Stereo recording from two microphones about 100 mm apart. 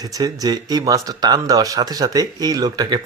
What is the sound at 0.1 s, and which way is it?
Speech, 40° right (ahead or behind).